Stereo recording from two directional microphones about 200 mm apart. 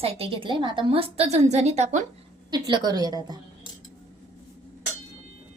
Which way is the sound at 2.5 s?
20° right (ahead or behind).